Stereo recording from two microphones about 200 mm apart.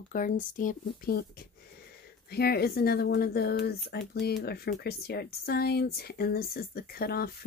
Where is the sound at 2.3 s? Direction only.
50° left (ahead or behind).